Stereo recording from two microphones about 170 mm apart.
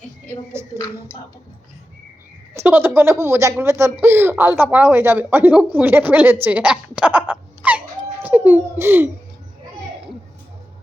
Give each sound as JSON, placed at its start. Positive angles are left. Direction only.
{"t": 2.6, "sound": "speech", "side_deg": -15}